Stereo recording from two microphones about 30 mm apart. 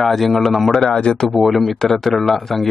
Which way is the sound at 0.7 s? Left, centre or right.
Left.